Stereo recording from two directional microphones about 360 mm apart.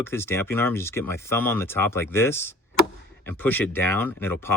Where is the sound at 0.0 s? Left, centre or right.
Centre.